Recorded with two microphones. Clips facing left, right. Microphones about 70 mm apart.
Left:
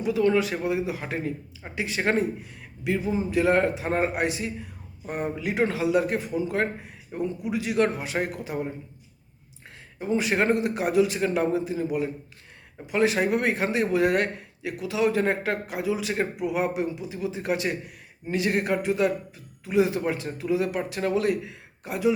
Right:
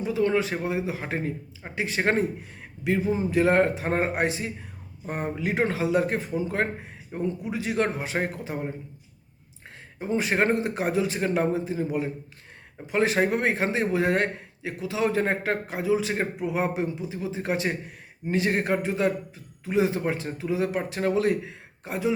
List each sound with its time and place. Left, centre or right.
0.0 s a man's voice: right
10.1 s a man's voice: right